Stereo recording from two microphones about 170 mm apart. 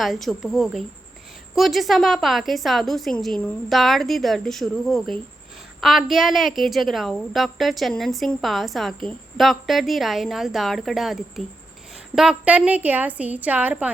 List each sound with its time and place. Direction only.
0.0 s a woman's voice: centre (ahead or behind)